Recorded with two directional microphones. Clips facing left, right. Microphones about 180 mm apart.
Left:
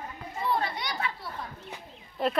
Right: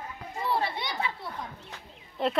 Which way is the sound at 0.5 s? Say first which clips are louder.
Right 2 dB; 25° right (ahead or behind).